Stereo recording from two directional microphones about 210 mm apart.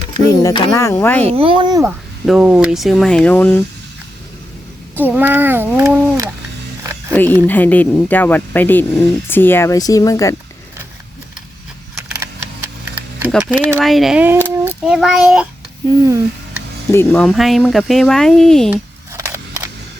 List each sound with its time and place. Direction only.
0.4 s speech: 15° left (ahead or behind)
1.3 s a child's voice: 25° right (ahead or behind)
2.2 s speech: 5° right (ahead or behind)
4.9 s speech: 10° right (ahead or behind)
7.1 s speech: 10° left (ahead or behind)
13.2 s a child's voice: 5° right (ahead or behind)
15.9 s speech: 15° right (ahead or behind)
16.9 s speech: 10° left (ahead or behind)
18.7 s a sound: 10° right (ahead or behind)